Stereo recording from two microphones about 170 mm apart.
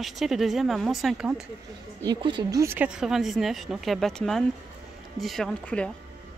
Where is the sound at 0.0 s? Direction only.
Centre (ahead or behind).